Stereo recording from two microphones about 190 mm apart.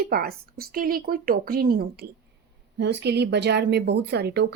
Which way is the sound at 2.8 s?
65° right (ahead or behind).